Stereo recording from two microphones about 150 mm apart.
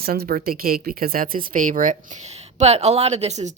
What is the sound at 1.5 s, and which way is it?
Speech, 60° right (ahead or behind).